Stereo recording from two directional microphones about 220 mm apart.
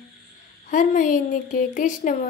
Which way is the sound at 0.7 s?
35° left (ahead or behind).